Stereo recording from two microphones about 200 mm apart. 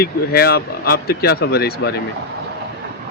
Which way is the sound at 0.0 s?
50° left (ahead or behind).